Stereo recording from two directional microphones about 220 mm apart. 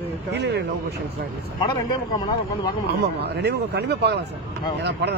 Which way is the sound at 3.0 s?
50° right (ahead or behind).